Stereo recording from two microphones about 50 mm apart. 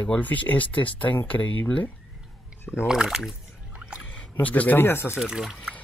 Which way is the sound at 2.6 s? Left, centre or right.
Left.